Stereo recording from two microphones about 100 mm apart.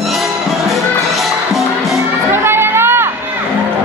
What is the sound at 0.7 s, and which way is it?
Music, centre (ahead or behind).